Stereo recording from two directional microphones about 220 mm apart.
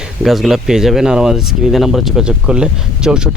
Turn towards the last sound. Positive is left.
turn(degrees=-5)  # may be behind; listen again after turning